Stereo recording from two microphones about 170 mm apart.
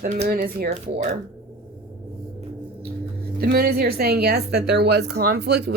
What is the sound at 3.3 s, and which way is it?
A woman's voice, 70° right (ahead or behind).